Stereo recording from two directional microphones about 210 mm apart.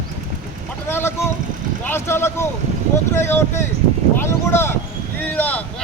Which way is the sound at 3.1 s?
10° left (ahead or behind).